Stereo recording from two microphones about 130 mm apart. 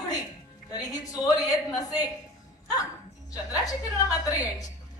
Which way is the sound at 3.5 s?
25° left (ahead or behind).